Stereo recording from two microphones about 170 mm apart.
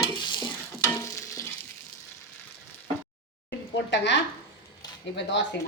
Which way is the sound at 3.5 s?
90° left.